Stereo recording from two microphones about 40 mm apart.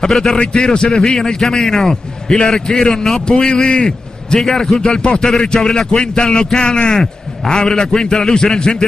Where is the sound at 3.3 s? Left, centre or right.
Centre.